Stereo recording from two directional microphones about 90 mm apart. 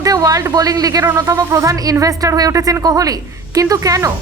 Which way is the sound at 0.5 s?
45° right (ahead or behind).